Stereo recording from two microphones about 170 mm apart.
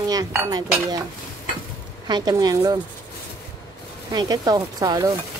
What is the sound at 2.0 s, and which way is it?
Speech, 25° right (ahead or behind).